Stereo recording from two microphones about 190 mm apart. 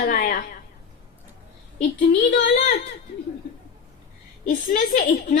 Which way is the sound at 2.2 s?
55° left (ahead or behind).